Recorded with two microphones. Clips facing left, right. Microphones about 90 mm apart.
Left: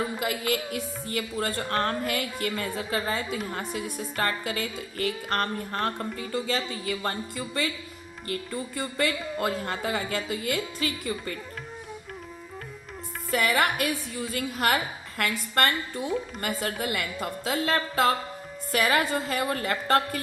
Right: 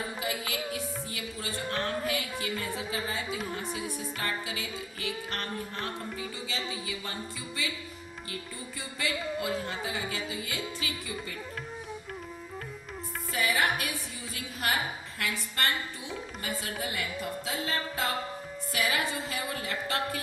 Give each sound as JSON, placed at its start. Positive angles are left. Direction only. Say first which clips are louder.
{"t": 0.2, "sound": "a woman's voice", "louder": "left 6 dB", "side_deg": 60}
{"t": 3.2, "sound": "a woman's voice", "louder": "left 3 dB", "side_deg": -5}
{"t": 3.9, "sound": "a woman's voice", "louder": "left 5 dB", "side_deg": 65}
{"t": 13.3, "sound": "a woman's voice", "louder": "left 4 dB", "side_deg": 70}
{"t": 18.7, "sound": "a woman's voice", "louder": "left 7 dB", "side_deg": 55}